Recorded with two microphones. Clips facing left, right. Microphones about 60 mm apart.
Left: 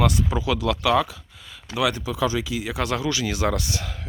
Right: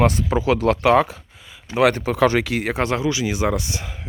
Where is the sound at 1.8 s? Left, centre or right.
Right.